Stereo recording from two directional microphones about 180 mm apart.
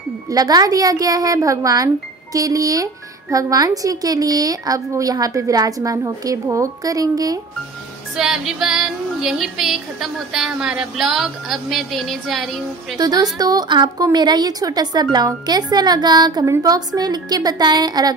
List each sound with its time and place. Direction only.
0.3 s a woman's voice: 20° right (ahead or behind)
8.2 s a woman's voice: centre (ahead or behind)
12.9 s a woman's voice: 20° right (ahead or behind)